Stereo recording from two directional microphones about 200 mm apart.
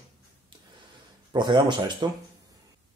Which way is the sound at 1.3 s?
20° right (ahead or behind).